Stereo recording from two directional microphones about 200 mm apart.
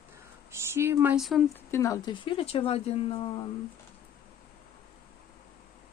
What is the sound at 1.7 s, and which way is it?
Speech, 15° left (ahead or behind).